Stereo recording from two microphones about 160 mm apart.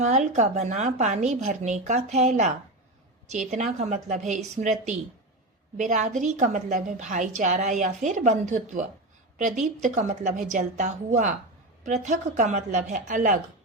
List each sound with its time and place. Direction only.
0.0 s a woman's voice: 50° right (ahead or behind)
3.5 s a woman's voice: 45° right (ahead or behind)
5.7 s a woman's voice: 50° right (ahead or behind)